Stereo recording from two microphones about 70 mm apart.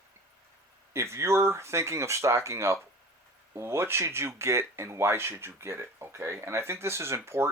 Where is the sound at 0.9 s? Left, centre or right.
Right.